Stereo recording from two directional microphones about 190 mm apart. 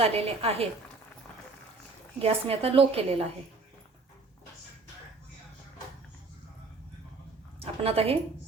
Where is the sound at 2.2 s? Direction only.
30° right (ahead or behind).